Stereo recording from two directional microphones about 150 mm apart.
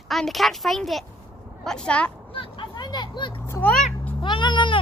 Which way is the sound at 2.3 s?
35° left (ahead or behind).